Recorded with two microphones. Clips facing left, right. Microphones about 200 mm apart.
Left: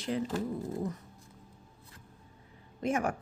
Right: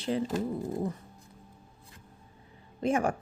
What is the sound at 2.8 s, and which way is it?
Speech, 30° right (ahead or behind).